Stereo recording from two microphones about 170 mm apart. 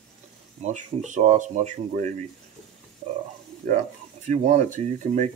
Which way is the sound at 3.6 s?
45° right (ahead or behind).